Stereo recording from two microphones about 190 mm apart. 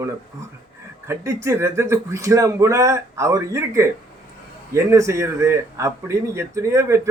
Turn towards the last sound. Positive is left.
turn(degrees=-15)  # may be behind; listen again after turning